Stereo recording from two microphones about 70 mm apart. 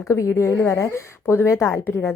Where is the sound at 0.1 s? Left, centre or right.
Left.